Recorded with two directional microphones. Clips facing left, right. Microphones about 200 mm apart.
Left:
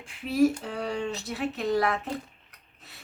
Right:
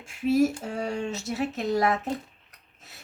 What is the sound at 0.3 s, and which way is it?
Speech, 45° right (ahead or behind).